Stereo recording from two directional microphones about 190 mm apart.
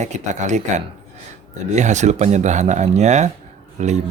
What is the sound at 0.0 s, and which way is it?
Speech, 40° right (ahead or behind).